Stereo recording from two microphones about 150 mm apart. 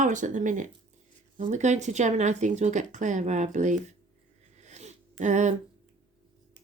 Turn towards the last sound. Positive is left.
turn(degrees=-55)  # may be behind; listen again after turning